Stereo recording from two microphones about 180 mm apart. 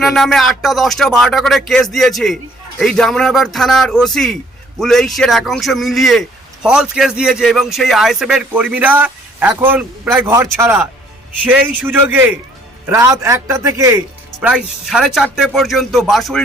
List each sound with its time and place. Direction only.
0.0 s a man's voice: centre (ahead or behind); by 14.0 s 15° right (ahead or behind)
14.4 s a man's voice: 5° right (ahead or behind)